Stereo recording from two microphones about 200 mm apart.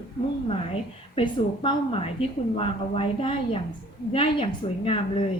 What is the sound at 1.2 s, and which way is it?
A woman's voice, 25° left (ahead or behind).